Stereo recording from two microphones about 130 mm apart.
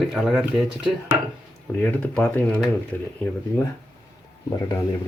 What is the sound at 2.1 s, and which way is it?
Speech, 10° left (ahead or behind).